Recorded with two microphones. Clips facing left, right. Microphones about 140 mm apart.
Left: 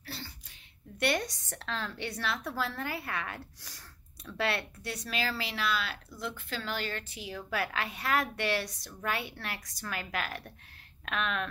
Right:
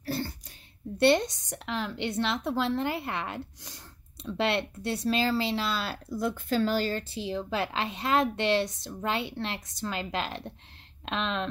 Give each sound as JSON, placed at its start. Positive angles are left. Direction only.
{"t": 0.0, "sound": "throat clearing", "side_deg": -50}
{"t": 0.9, "sound": "a woman's voice", "side_deg": -25}